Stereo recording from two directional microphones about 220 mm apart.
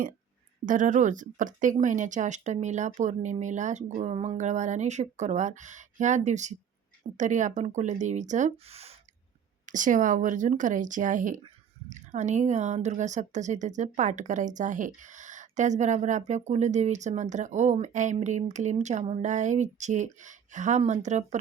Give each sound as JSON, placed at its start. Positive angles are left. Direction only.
{"t": 0.6, "sound": "a woman's voice", "side_deg": -35}